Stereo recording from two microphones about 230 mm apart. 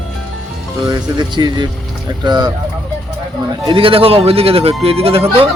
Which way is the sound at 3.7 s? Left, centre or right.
Right.